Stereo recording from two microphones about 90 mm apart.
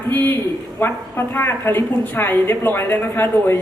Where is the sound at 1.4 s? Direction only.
25° left (ahead or behind).